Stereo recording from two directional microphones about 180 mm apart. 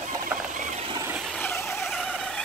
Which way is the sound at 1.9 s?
Centre (ahead or behind).